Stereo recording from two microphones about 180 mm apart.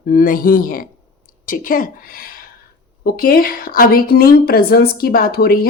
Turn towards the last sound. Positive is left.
turn(degrees=60)  # may be behind; listen again after turning